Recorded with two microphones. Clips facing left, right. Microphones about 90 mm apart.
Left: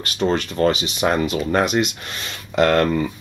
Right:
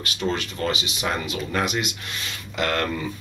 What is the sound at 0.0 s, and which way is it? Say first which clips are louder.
Speech: left 6 dB; 40° left (ahead or behind).